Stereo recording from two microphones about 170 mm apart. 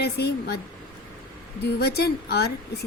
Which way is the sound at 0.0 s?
70° left (ahead or behind).